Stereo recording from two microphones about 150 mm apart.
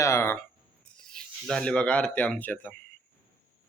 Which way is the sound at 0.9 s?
5° left (ahead or behind).